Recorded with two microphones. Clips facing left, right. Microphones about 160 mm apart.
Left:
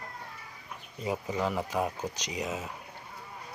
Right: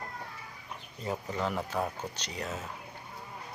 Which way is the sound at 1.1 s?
5° left (ahead or behind).